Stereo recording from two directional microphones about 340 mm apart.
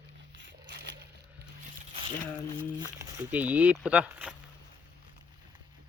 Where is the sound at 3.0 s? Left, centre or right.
Centre.